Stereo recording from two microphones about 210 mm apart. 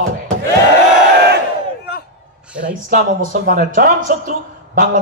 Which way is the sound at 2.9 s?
40° right (ahead or behind).